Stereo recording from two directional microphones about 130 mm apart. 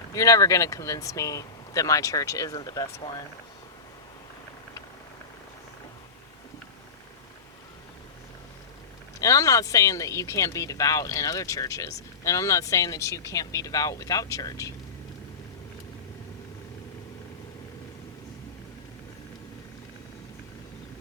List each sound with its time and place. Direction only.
0.1 s speech: 25° left (ahead or behind)
9.2 s speech: 25° left (ahead or behind)